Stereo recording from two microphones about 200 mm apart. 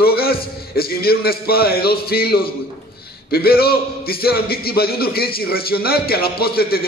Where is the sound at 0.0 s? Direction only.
50° left (ahead or behind).